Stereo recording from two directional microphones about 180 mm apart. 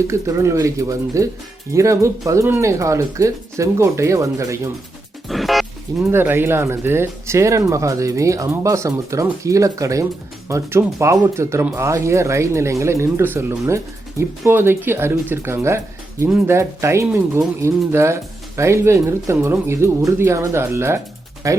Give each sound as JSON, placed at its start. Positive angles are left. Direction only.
{"t": 0.1, "sound": "speech", "side_deg": -15}
{"t": 5.3, "sound": "music", "side_deg": 0}
{"t": 6.1, "sound": "speech", "side_deg": -10}